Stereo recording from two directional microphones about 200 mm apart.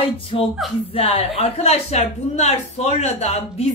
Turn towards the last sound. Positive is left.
turn(degrees=35)  # may be behind; listen again after turning